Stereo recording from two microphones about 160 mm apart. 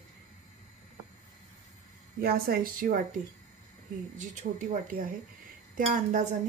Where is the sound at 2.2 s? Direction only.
70° right (ahead or behind).